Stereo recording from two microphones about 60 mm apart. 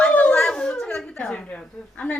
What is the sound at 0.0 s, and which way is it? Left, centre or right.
Howl, left.